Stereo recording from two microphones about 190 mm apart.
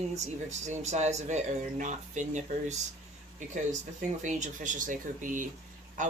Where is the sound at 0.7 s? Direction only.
35° right (ahead or behind).